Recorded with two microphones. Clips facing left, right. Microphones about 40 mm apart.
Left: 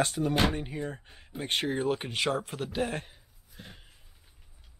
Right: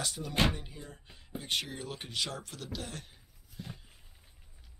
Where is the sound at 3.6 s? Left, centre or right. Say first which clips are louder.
Right 3 dB; left.